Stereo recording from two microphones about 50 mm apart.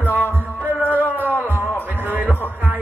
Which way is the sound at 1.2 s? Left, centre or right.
Right.